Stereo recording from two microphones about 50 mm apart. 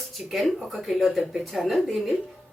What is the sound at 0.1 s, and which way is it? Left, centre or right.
A woman's voice, centre.